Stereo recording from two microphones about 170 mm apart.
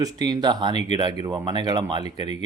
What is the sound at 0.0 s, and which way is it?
Speech, 25° right (ahead or behind).